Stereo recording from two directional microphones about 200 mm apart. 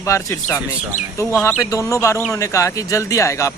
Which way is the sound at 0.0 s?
15° left (ahead or behind).